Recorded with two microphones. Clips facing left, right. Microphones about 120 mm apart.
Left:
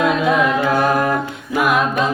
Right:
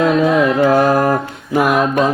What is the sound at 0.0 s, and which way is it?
Music, 35° right (ahead or behind).